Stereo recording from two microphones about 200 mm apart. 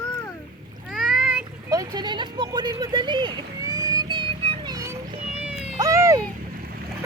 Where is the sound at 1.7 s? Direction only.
20° right (ahead or behind).